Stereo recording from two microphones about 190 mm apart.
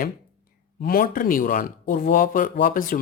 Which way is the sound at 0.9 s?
50° left (ahead or behind).